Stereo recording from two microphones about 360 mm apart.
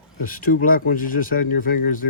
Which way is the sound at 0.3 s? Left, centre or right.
Left.